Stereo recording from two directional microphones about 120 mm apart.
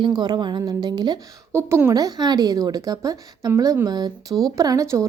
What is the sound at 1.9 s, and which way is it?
A woman's voice, 35° right (ahead or behind).